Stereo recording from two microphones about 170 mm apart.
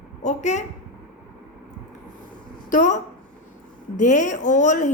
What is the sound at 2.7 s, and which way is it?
Speech, 45° left (ahead or behind).